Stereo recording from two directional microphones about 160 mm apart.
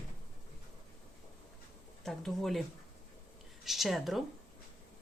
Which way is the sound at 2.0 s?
Centre (ahead or behind).